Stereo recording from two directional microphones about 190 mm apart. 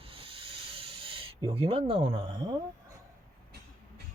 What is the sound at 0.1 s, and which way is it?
Hiss, 30° right (ahead or behind).